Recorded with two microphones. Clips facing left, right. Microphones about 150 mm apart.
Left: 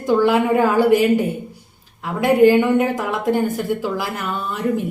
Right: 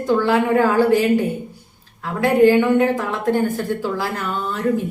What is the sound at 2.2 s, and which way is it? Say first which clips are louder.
A woman's voice: left 1 dB; 15° left (ahead or behind).